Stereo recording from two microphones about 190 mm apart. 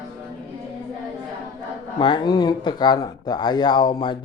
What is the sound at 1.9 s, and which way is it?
Speech, 25° left (ahead or behind).